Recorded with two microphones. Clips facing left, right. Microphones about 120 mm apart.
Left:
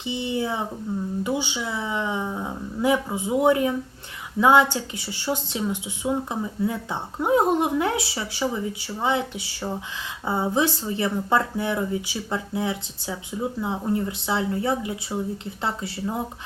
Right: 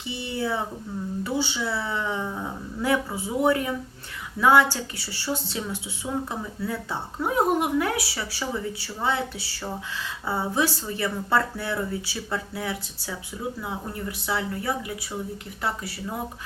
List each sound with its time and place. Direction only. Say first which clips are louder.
0.0 s a woman's voice: left 3 dB; 20° left (ahead or behind)